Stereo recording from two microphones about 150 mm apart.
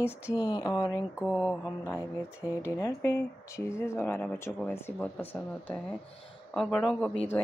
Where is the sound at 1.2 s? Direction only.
10° right (ahead or behind).